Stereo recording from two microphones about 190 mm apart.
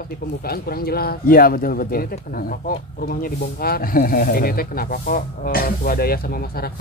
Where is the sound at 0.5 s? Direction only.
50° left (ahead or behind).